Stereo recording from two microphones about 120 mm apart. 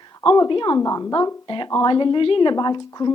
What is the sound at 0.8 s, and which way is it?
Speech, 30° left (ahead or behind).